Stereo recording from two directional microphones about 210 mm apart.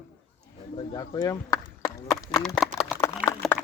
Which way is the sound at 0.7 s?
25° left (ahead or behind).